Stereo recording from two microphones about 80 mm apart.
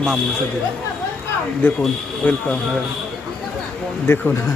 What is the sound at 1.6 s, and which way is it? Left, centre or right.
Speech, left.